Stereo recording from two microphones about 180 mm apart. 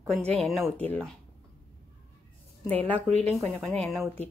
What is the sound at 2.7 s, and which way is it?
A woman's voice, 10° left (ahead or behind).